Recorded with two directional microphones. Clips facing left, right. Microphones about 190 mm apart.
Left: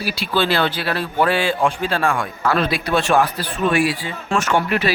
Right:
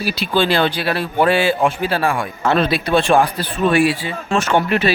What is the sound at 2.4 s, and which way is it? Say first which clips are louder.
Speech: right 3 dB; 25° right (ahead or behind).